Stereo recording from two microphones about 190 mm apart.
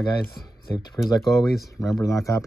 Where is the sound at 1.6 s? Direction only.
15° left (ahead or behind).